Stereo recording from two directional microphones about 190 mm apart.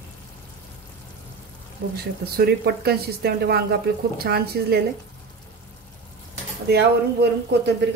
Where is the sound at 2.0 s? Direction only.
55° right (ahead or behind).